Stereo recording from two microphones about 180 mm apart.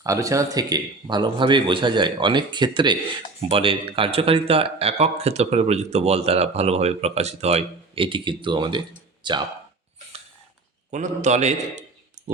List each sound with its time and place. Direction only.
0.0 s speech: 20° right (ahead or behind)
10.9 s speech: 40° right (ahead or behind)